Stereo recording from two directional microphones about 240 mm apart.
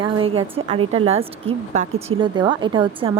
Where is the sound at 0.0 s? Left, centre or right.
Right.